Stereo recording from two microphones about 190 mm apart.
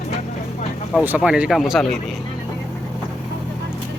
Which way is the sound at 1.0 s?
5° right (ahead or behind).